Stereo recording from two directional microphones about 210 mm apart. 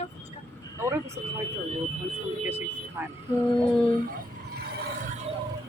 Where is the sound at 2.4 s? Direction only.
10° right (ahead or behind).